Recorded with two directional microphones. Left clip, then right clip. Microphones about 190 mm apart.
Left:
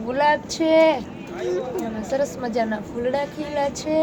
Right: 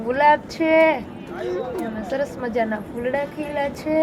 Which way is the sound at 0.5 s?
Centre (ahead or behind).